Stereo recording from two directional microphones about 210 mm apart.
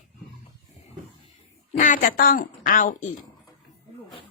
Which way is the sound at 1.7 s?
35° left (ahead or behind).